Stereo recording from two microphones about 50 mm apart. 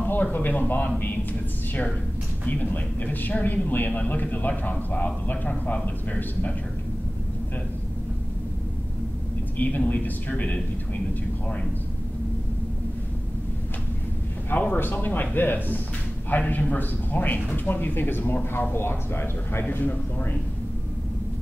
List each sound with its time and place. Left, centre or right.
0.0 s a man's voice: left
2.4 s a man's voice: left
9.6 s a man's voice: left
14.5 s a man's voice: left
19.7 s a man's voice: left